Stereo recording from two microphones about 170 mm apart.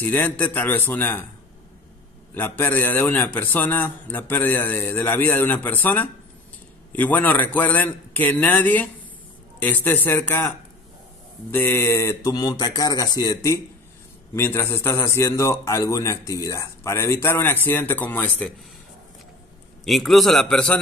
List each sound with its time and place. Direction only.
0.0 s a man's voice: 10° left (ahead or behind)
2.3 s a man's voice: 10° left (ahead or behind)
11.5 s a man's voice: 15° left (ahead or behind)
19.8 s a man's voice: centre (ahead or behind)